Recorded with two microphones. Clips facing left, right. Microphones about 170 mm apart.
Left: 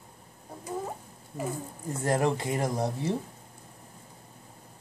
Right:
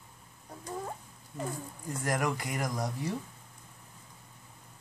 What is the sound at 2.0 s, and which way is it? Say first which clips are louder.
Speech: left 5 dB; 25° left (ahead or behind).